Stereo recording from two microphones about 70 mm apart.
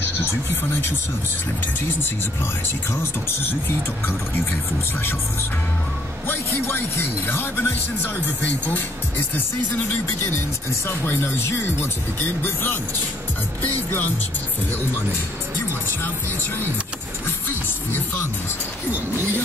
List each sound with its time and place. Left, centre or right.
2.9 s speech: left
6.2 s speech: left
8.4 s music: left
10.9 s speech: left
13.6 s music: left